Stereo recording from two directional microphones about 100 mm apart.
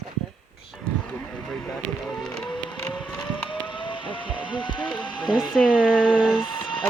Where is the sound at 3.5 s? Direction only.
55° left (ahead or behind).